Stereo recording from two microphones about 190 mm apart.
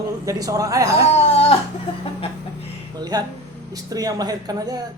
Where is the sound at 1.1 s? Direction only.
30° left (ahead or behind).